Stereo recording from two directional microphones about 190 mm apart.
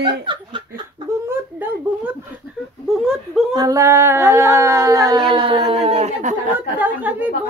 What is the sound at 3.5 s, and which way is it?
A woman's voice, 20° right (ahead or behind).